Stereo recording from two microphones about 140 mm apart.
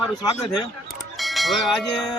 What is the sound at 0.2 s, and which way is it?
Speech, 30° left (ahead or behind).